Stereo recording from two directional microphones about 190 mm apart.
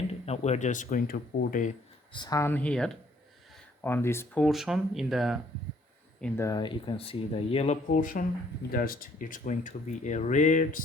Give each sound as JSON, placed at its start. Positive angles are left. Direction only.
{"t": 0.1, "sound": "speech", "side_deg": 35}
{"t": 2.1, "sound": "speech", "side_deg": 20}
{"t": 4.4, "sound": "speech", "side_deg": 0}
{"t": 6.4, "sound": "speech", "side_deg": 20}
{"t": 7.9, "sound": "speech", "side_deg": 45}